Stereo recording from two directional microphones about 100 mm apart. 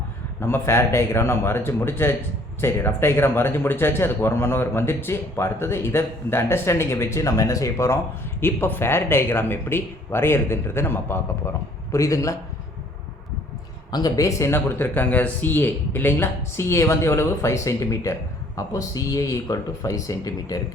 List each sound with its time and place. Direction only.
0.3 s speech: 25° left (ahead or behind)
13.9 s speech: 40° left (ahead or behind)